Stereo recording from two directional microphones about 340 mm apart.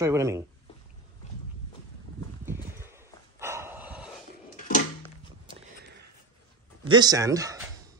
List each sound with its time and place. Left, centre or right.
0.0 s speech: centre
2.4 s dog: centre
4.6 s a sound: left
6.8 s speech: centre